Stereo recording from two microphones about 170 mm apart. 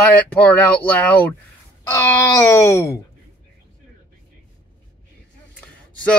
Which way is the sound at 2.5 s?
15° left (ahead or behind).